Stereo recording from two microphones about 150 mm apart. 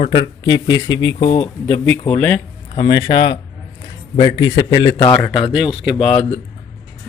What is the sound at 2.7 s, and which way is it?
Speech, 30° left (ahead or behind).